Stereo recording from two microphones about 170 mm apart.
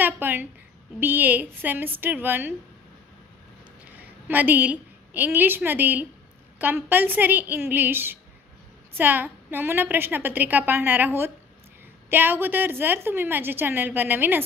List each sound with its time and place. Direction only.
0.0 s a sound: 10° right (ahead or behind)
0.9 s a woman's voice: 10° right (ahead or behind)
3.8 s a woman's voice: 10° right (ahead or behind)